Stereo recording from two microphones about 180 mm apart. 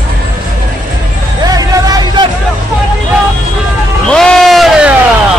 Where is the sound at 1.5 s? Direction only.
20° right (ahead or behind).